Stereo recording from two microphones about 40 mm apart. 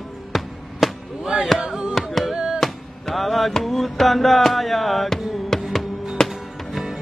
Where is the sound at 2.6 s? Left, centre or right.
Centre.